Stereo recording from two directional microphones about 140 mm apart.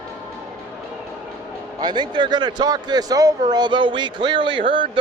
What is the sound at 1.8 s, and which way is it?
Speech, 30° right (ahead or behind).